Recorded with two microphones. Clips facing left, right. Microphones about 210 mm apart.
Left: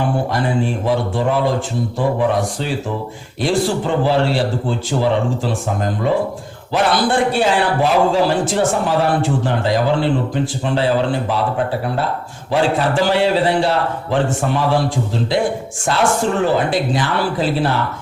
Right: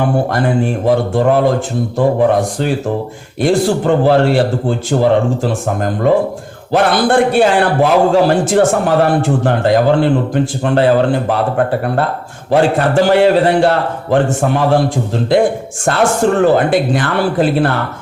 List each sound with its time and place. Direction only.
0.0 s a man's voice: 55° right (ahead or behind)